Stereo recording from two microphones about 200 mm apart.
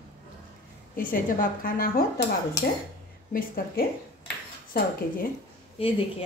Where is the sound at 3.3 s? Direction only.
45° left (ahead or behind).